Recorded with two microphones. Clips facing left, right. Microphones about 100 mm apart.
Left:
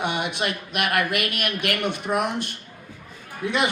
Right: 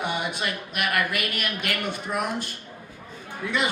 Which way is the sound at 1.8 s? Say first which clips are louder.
Left 5 dB; 20° left (ahead or behind).